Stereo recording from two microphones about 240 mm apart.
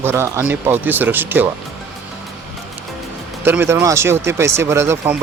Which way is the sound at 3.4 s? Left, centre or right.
Centre.